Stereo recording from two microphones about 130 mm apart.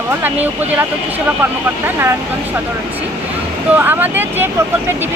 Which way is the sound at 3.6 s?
15° right (ahead or behind).